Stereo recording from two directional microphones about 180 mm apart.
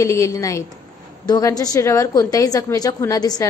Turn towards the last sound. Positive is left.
turn(degrees=20)  # may be behind; listen again after turning